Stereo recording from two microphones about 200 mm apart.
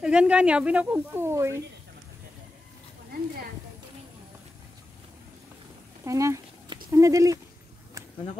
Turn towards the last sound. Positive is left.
turn(degrees=-15)  # may be behind; listen again after turning